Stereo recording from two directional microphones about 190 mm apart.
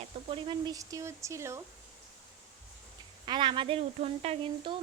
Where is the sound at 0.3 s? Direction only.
25° right (ahead or behind).